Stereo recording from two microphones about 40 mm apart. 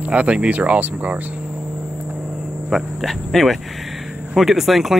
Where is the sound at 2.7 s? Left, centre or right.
Centre.